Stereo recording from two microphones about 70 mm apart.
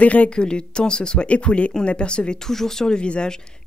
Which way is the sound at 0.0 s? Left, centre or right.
Centre.